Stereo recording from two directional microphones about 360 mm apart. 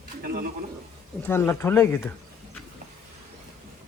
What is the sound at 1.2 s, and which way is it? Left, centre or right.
Speech, centre.